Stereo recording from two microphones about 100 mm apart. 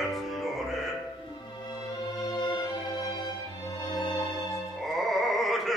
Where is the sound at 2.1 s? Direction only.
45° left (ahead or behind).